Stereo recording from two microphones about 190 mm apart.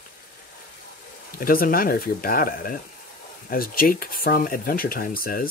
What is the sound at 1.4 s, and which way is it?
Speech, 50° left (ahead or behind).